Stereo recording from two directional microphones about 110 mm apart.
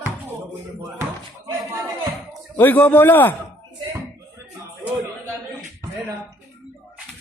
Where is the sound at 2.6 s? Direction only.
15° left (ahead or behind).